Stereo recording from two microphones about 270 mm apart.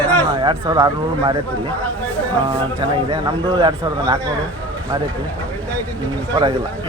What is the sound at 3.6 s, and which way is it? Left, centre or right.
Speech, centre.